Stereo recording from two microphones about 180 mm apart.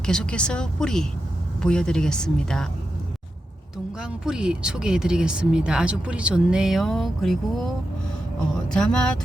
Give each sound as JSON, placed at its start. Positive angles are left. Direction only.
{"t": 0.0, "sound": "speech", "side_deg": 5}
{"t": 4.0, "sound": "speech", "side_deg": -5}
{"t": 8.7, "sound": "speech", "side_deg": 5}